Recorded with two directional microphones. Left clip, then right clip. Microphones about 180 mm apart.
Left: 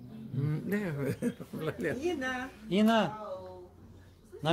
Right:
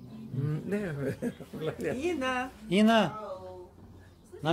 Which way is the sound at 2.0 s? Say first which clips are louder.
Right 2 dB; 40° right (ahead or behind).